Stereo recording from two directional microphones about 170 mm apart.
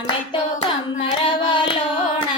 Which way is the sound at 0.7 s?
30° left (ahead or behind).